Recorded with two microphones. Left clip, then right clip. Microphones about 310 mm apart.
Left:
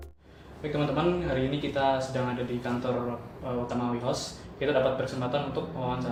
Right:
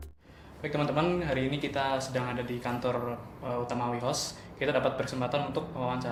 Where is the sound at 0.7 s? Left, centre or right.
Right.